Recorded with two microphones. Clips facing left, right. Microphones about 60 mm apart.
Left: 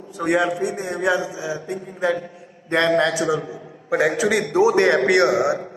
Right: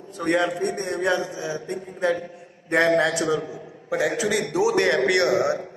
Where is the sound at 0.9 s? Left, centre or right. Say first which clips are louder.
Left 3 dB; centre.